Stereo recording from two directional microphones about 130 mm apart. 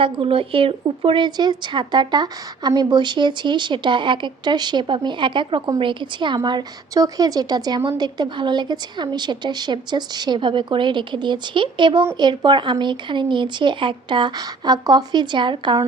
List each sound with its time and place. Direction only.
0.0 s a woman's voice: 45° right (ahead or behind)